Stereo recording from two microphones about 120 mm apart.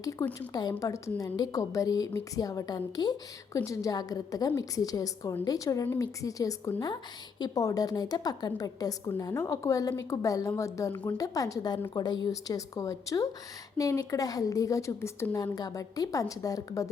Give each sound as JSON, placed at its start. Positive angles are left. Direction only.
{"t": 0.3, "sound": "a woman's voice", "side_deg": 30}